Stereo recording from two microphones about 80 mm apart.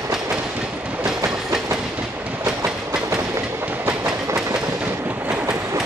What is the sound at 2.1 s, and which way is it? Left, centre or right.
Train, right.